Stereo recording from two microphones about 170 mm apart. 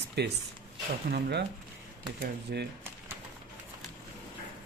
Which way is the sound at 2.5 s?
70° right (ahead or behind).